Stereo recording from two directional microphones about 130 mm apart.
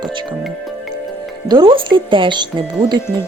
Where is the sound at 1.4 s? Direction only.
40° right (ahead or behind).